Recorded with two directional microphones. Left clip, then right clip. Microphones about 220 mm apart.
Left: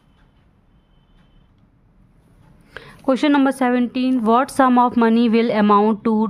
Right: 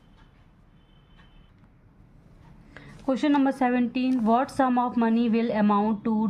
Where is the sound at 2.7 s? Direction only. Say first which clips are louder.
Left 8 dB; 50° left (ahead or behind).